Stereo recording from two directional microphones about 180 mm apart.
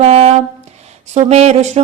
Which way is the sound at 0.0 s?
35° right (ahead or behind).